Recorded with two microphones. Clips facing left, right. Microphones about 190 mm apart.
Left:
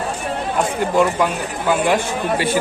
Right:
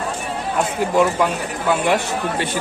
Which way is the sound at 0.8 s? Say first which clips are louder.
Even; centre (ahead or behind).